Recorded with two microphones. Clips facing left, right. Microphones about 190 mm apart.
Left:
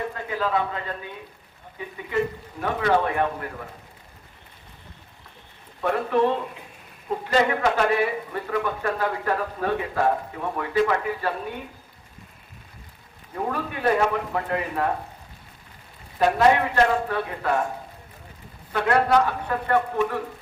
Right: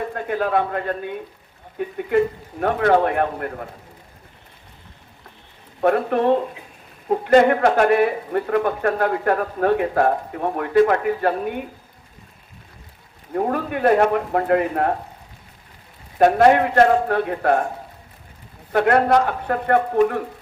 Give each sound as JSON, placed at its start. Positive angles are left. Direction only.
{"t": 0.1, "sound": "speech", "side_deg": -55}
{"t": 5.8, "sound": "speech", "side_deg": -55}
{"t": 13.3, "sound": "speech", "side_deg": -55}
{"t": 16.1, "sound": "speech", "side_deg": -55}
{"t": 18.7, "sound": "speech", "side_deg": -55}